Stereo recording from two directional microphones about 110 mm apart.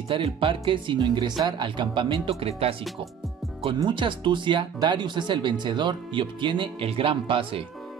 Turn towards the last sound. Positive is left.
turn(degrees=-55)  # may be behind; listen again after turning